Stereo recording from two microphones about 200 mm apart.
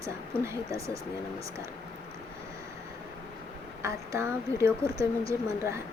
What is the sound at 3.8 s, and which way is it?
Speech, 15° right (ahead or behind).